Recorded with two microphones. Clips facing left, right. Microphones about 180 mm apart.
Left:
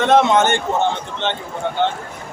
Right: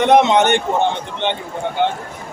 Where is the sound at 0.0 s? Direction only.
15° right (ahead or behind).